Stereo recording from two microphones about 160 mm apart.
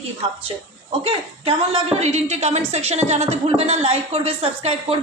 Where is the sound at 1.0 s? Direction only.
35° right (ahead or behind).